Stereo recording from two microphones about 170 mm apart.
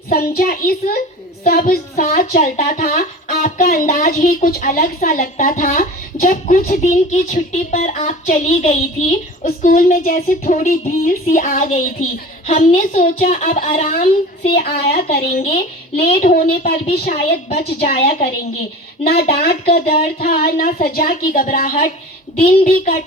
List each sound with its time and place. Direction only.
0.1 s a woman's voice: 55° left (ahead or behind)
17.9 s a woman's voice: 35° left (ahead or behind)
19.0 s a woman's voice: 65° left (ahead or behind); by 23.0 s 50° left (ahead or behind)